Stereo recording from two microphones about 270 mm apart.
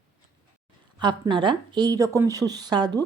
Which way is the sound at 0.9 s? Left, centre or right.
Centre.